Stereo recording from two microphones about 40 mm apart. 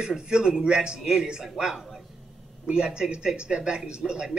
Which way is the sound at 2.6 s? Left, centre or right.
Right.